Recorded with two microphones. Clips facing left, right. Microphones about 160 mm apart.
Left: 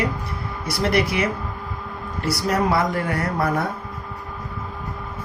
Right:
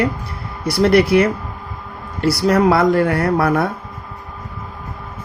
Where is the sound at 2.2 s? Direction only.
70° right (ahead or behind).